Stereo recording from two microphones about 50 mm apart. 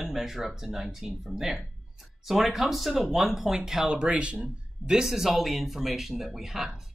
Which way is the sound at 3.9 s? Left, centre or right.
Centre.